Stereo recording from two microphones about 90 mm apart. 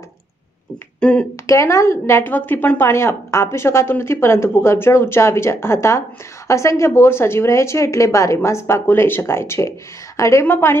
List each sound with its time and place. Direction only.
1.0 s speech: 10° left (ahead or behind)
1.5 s speech: 35° left (ahead or behind)